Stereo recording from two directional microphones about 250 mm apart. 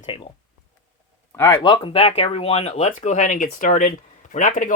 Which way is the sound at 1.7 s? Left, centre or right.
Left.